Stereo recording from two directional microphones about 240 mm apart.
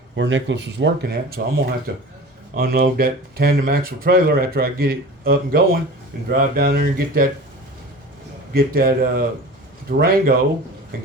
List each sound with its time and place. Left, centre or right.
0.2 s speech: right
8.5 s speech: right